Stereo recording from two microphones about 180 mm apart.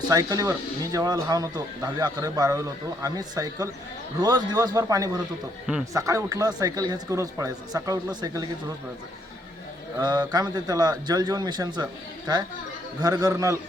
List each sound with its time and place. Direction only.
0.1 s a man's voice: 20° right (ahead or behind)
10.0 s a man's voice: 25° right (ahead or behind)
13.0 s a man's voice: 20° right (ahead or behind)